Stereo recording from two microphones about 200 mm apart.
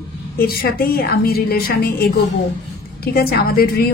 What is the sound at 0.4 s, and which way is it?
A woman's voice, 50° left (ahead or behind).